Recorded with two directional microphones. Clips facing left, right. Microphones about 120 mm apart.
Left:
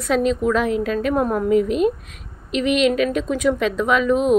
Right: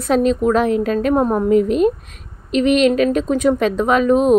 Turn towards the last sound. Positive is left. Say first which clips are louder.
# right 4 dB
turn(degrees=-40)  # may be behind; listen again after turning